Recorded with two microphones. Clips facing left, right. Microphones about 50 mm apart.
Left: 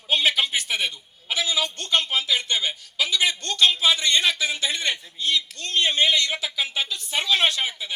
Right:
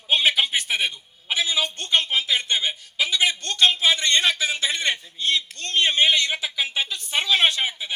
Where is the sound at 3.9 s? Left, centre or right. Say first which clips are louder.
Right 1 dB; right.